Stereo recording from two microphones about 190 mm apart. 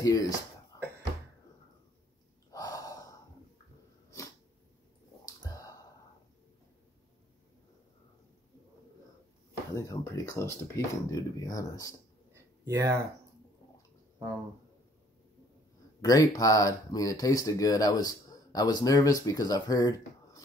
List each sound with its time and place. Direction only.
0.0 s speech: 15° left (ahead or behind)
2.5 s gasp: 20° left (ahead or behind)
5.2 s clicking: 20° left (ahead or behind)
9.8 s speech: 15° left (ahead or behind)
12.3 s a sound: 15° right (ahead or behind)
16.0 s speech: 20° left (ahead or behind)